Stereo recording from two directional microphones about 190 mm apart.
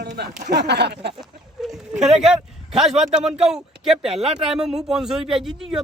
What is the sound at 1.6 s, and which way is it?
A man's voice, 5° right (ahead or behind).